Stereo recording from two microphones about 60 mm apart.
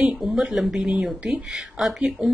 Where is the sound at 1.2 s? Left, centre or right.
Centre.